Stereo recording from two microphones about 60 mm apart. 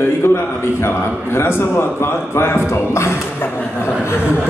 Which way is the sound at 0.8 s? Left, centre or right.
Left.